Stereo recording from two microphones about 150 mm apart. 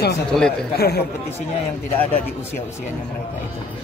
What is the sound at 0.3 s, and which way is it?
Speech, centre (ahead or behind).